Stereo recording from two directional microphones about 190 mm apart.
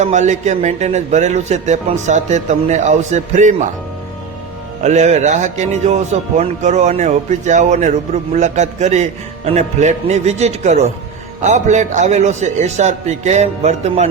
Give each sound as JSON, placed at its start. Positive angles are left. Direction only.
{"t": 0.0, "sound": "speech", "side_deg": -40}
{"t": 4.8, "sound": "speech", "side_deg": -40}